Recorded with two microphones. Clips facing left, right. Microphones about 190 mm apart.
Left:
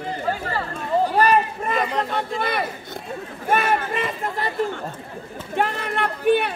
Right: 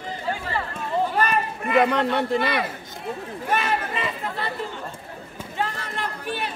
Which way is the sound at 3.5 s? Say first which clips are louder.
Left 4 dB; 55° left (ahead or behind).